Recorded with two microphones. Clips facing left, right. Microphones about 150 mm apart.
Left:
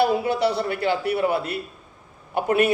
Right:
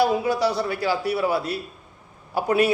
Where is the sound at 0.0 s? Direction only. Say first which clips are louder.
Even; 60° left (ahead or behind).